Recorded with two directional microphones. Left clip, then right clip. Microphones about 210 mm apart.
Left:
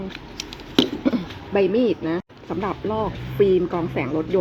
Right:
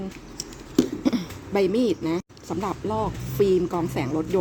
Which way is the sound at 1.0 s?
20° right (ahead or behind).